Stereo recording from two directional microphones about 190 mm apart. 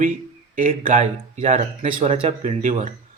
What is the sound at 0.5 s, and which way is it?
Speech, 45° right (ahead or behind).